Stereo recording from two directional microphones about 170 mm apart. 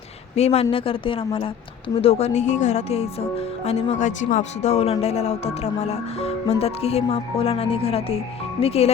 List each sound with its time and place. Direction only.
0.3 s speech: 40° left (ahead or behind)